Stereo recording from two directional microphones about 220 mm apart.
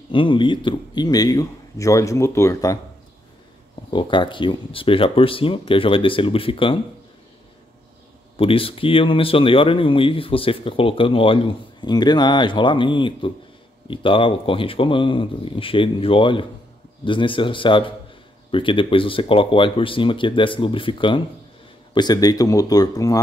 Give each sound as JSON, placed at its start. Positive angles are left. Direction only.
{"t": 0.1, "sound": "speech", "side_deg": 20}
{"t": 3.9, "sound": "speech", "side_deg": 20}
{"t": 8.4, "sound": "speech", "side_deg": 25}